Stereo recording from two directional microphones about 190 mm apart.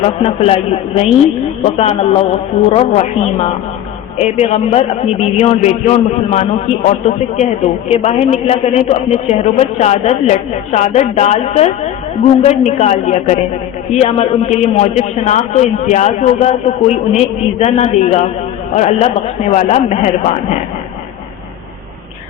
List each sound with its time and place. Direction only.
0.0 s a man's voice: 30° left (ahead or behind)